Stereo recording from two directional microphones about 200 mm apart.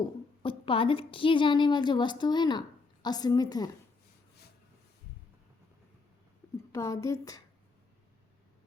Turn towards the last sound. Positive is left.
turn(degrees=15)  # may be behind; listen again after turning